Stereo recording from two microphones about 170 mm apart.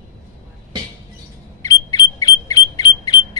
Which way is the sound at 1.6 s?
20° left (ahead or behind).